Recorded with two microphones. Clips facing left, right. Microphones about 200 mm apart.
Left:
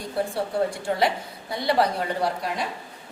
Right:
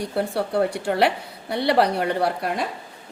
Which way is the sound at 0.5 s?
65° right (ahead or behind).